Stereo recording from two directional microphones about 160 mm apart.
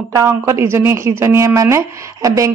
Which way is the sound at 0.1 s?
15° right (ahead or behind).